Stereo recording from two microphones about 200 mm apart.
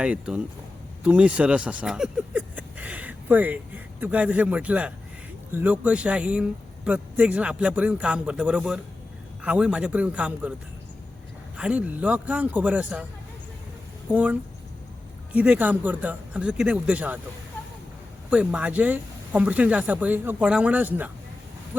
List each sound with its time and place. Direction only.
0.0 s speech: 5° right (ahead or behind)
11.5 s speech: 5° right (ahead or behind)
14.1 s speech: 5° right (ahead or behind)
18.3 s speech: 5° right (ahead or behind)